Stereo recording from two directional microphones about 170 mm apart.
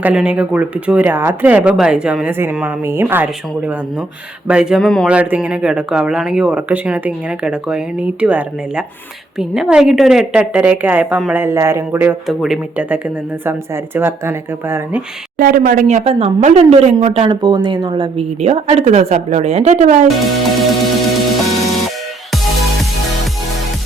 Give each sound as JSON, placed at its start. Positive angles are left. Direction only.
{"t": 0.0, "sound": "speech", "side_deg": -5}
{"t": 4.4, "sound": "speech", "side_deg": -5}
{"t": 15.4, "sound": "speech", "side_deg": -55}
{"t": 17.4, "sound": "speech", "side_deg": -25}
{"t": 18.3, "sound": "speech", "side_deg": -40}
{"t": 20.1, "sound": "speech", "side_deg": 0}
{"t": 21.3, "sound": "music", "side_deg": 0}